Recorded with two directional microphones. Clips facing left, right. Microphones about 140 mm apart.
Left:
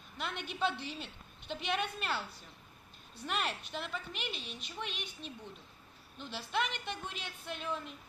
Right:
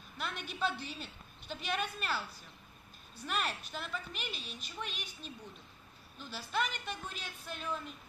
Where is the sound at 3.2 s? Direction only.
25° left (ahead or behind).